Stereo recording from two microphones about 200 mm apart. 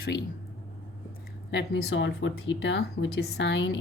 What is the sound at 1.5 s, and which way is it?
Speech, 60° left (ahead or behind).